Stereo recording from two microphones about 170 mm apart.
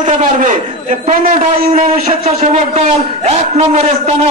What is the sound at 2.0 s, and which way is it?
A man's voice, 40° right (ahead or behind).